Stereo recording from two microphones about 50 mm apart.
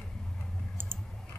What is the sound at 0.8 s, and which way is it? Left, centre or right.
Clicking, right.